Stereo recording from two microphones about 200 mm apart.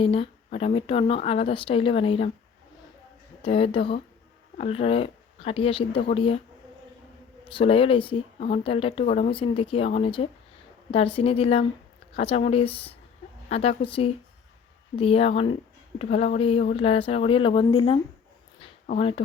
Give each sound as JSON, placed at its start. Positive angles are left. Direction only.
{"t": 0.0, "sound": "speech", "side_deg": 25}
{"t": 3.4, "sound": "speech", "side_deg": 25}
{"t": 7.4, "sound": "speech", "side_deg": 25}